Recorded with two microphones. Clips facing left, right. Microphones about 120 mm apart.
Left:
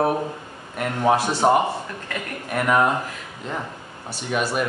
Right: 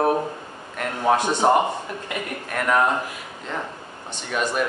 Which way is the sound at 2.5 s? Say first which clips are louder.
Left 1 dB; 15° left (ahead or behind).